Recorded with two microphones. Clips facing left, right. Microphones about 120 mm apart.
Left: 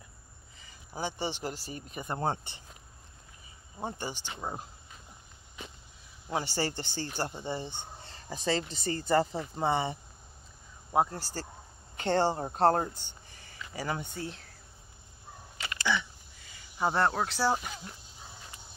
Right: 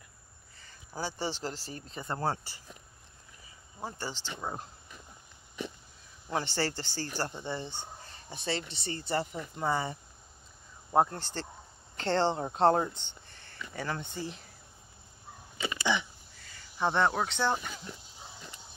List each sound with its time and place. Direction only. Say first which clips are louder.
0.6 s speech: left 1 dB; 15° left (ahead or behind)
3.7 s speech: left 2 dB; 20° left (ahead or behind)
6.3 s speech: even; 10° left (ahead or behind)
8.0 s speech: left 5 dB; 35° left (ahead or behind)
9.3 s speech: left 2 dB; 25° left (ahead or behind)
10.9 s speech: right 1 dB; 5° left (ahead or behind)
15.8 s a sound: even; 20° right (ahead or behind)
16.4 s speech: even; 10° left (ahead or behind)